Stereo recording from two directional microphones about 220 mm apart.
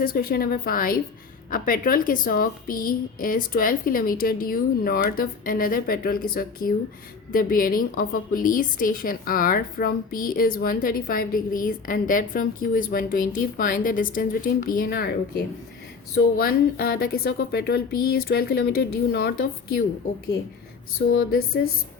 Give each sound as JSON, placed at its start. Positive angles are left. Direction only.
{"t": 0.0, "sound": "a woman's voice", "side_deg": 45}
{"t": 21.1, "sound": "speech", "side_deg": 45}